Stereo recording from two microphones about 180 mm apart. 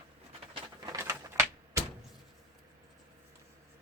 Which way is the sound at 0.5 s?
20° right (ahead or behind).